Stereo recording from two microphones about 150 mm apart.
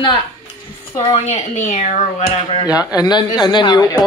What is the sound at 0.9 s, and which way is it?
Speech, 45° left (ahead or behind).